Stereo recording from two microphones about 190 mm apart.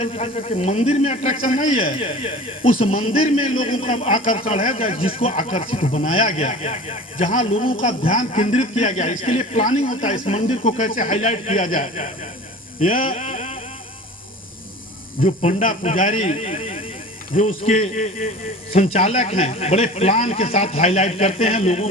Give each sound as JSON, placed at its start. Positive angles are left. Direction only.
{"t": 0.0, "sound": "a man's voice", "side_deg": 30}
{"t": 1.7, "sound": "a man's voice", "side_deg": 30}
{"t": 4.7, "sound": "speech", "side_deg": 30}
{"t": 5.3, "sound": "a man's voice", "side_deg": 40}
{"t": 8.0, "sound": "a man's voice", "side_deg": 40}
{"t": 12.8, "sound": "a sound", "side_deg": 45}
{"t": 15.2, "sound": "a man's voice", "side_deg": 35}